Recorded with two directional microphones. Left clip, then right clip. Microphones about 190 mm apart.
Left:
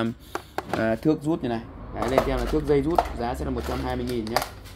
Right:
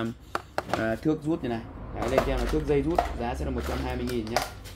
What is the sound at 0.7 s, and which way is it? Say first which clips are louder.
Speech: left 5 dB; 40° left (ahead or behind).